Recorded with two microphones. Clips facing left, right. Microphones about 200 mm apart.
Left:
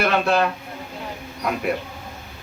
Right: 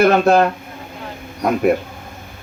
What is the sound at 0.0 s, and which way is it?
Speech, 45° right (ahead or behind).